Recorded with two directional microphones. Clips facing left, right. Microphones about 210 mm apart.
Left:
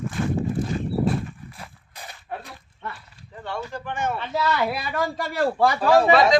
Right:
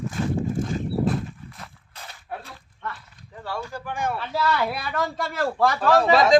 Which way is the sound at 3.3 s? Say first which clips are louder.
Even; 5° right (ahead or behind).